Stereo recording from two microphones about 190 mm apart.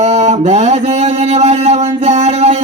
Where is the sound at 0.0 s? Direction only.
35° right (ahead or behind).